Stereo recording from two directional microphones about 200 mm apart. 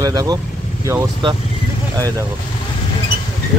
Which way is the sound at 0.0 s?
20° right (ahead or behind).